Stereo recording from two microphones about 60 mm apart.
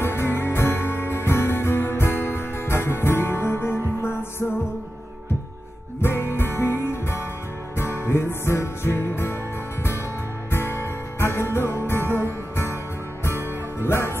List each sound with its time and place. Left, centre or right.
0.0 s music: left
5.9 s music: left
10.5 s music: left